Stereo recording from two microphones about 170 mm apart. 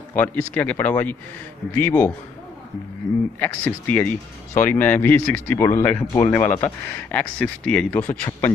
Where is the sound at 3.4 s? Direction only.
10° left (ahead or behind).